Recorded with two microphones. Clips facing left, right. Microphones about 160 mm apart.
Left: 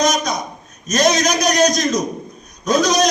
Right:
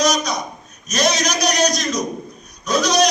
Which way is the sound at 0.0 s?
50° left (ahead or behind).